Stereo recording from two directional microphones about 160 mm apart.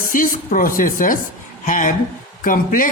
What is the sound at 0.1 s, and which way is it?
Speech, 55° left (ahead or behind).